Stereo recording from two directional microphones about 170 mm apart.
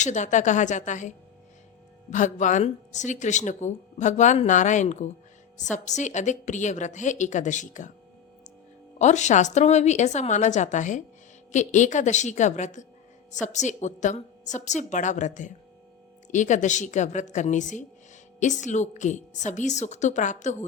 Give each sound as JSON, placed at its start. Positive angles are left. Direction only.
{"t": 0.0, "sound": "speech", "side_deg": 45}
{"t": 9.0, "sound": "speech", "side_deg": 45}